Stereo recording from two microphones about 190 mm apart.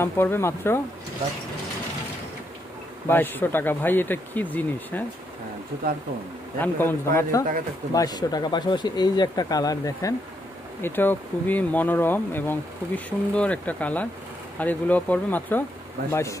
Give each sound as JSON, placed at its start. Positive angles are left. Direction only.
{"t": 0.0, "sound": "speech", "side_deg": 10}
{"t": 3.1, "sound": "speech", "side_deg": 10}
{"t": 6.6, "sound": "speech", "side_deg": 10}